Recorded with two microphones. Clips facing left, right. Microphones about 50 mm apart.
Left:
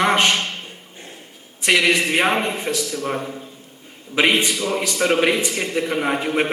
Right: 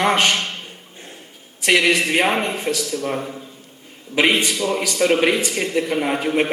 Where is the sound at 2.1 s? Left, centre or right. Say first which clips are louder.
Even; centre.